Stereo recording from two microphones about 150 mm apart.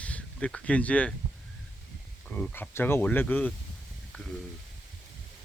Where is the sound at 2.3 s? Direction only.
10° left (ahead or behind).